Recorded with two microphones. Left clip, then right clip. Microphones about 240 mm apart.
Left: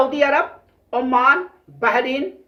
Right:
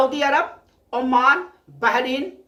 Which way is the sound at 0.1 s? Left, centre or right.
Centre.